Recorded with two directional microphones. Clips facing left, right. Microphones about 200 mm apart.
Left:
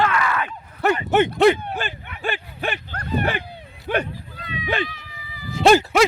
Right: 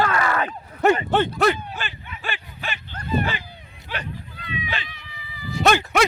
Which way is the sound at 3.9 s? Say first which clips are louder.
Left 11 dB; 50° left (ahead or behind).